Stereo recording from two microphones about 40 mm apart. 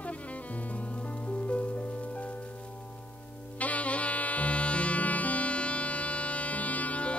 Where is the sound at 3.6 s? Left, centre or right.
Left.